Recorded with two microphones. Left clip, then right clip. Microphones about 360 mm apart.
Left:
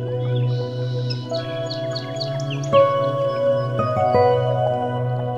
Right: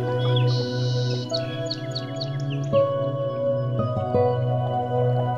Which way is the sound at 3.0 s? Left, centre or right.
Left.